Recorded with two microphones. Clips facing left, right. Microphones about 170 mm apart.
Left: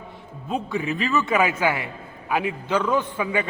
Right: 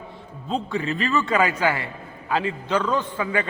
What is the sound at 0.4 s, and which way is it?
A man's voice, 15° left (ahead or behind).